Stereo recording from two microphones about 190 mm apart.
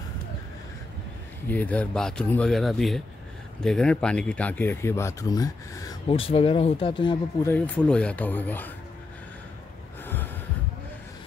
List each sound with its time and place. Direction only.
1.5 s speech: 10° left (ahead or behind); by 7.2 s 25° left (ahead or behind)
7.4 s speech: 10° left (ahead or behind)
10.0 s a sound: 10° left (ahead or behind)